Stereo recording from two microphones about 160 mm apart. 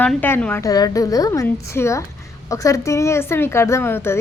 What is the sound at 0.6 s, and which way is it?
A woman's voice, 20° left (ahead or behind).